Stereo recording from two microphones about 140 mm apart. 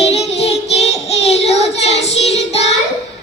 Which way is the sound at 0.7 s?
50° left (ahead or behind).